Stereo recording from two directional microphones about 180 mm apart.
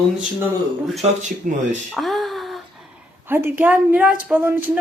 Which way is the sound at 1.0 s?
40° right (ahead or behind).